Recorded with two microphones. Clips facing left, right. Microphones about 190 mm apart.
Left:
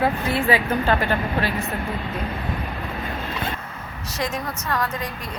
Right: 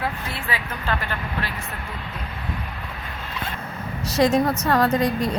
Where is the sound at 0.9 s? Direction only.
40° left (ahead or behind).